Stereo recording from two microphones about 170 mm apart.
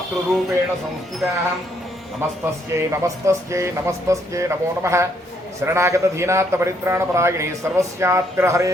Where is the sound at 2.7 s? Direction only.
15° right (ahead or behind).